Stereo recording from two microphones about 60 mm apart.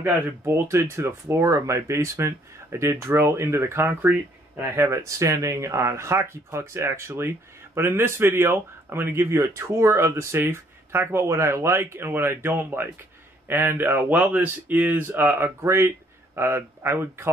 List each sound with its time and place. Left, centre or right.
0.5 s speech: right
5.0 s speech: right
9.2 s speech: right
14.1 s speech: right